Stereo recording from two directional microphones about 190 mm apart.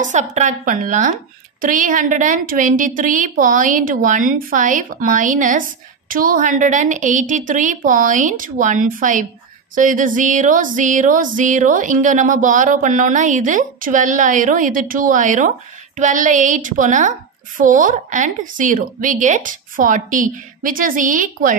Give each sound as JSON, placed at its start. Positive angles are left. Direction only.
{"t": 0.0, "sound": "a woman's voice", "side_deg": -40}